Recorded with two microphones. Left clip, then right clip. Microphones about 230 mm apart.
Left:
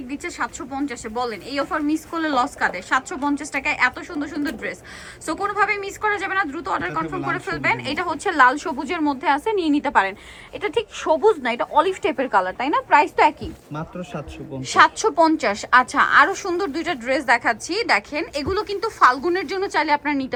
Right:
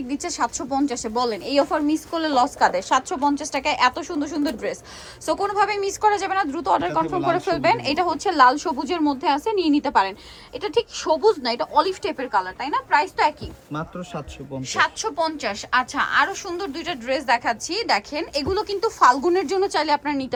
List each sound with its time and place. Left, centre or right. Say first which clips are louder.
0.1 s a woman's voice: right 2 dB; centre
9.6 s a woman's voice: right 1 dB; right
9.8 s a woman's voice: left 1 dB; centre